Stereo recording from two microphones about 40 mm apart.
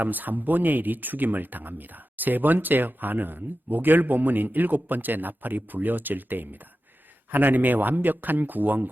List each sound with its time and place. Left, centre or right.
0.0 s speech: right